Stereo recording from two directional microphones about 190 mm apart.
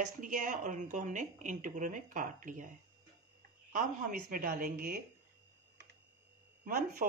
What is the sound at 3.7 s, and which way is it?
Speech, 50° right (ahead or behind).